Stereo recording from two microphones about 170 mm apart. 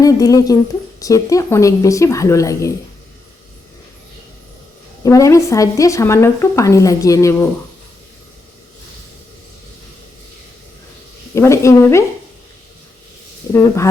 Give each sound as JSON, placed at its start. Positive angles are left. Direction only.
{"t": 0.0, "sound": "speech", "side_deg": 20}
{"t": 5.0, "sound": "speech", "side_deg": 20}
{"t": 11.3, "sound": "speech", "side_deg": 15}
{"t": 13.5, "sound": "speech", "side_deg": 15}